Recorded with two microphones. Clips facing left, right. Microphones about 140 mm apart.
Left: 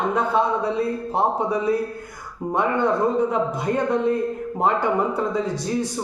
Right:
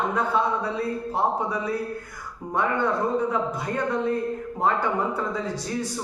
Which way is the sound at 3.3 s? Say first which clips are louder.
Left 4 dB; 20° left (ahead or behind).